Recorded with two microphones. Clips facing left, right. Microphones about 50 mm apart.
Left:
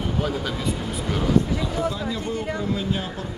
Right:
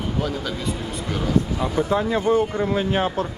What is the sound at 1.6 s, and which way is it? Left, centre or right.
Speech, right.